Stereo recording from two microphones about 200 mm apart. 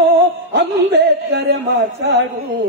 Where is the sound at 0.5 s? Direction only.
55° right (ahead or behind).